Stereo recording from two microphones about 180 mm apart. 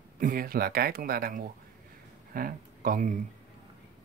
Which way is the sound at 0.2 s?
50° right (ahead or behind).